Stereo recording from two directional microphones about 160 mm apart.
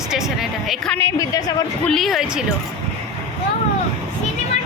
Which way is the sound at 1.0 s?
20° left (ahead or behind).